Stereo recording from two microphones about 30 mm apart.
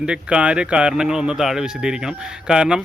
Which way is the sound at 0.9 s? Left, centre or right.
Centre.